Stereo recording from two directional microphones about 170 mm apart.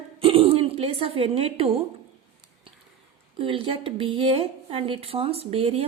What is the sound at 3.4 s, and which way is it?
A woman's voice, 30° right (ahead or behind).